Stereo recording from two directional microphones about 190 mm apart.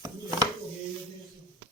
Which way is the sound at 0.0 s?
20° right (ahead or behind).